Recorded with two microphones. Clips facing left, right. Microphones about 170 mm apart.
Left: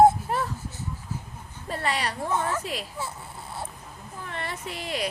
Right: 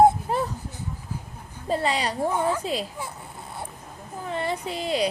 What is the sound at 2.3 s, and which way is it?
Speech, 10° right (ahead or behind).